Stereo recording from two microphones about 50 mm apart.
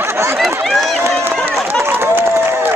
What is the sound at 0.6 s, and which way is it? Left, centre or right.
Speech, centre.